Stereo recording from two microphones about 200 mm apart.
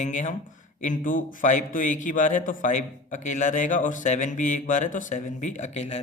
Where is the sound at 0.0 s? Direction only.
35° left (ahead or behind).